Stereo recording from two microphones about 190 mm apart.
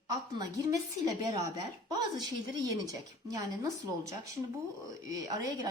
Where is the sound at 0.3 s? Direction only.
20° right (ahead or behind).